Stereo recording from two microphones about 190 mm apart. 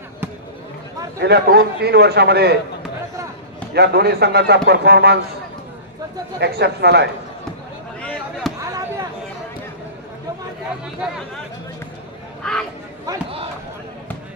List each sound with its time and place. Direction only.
1.2 s a man's voice: 60° right (ahead or behind)
3.7 s a man's voice: 60° right (ahead or behind)
6.4 s a man's voice: 60° right (ahead or behind)
8.0 s chop: 5° left (ahead or behind)
8.5 s a sound: 15° right (ahead or behind)
12.4 s speech: 5° left (ahead or behind)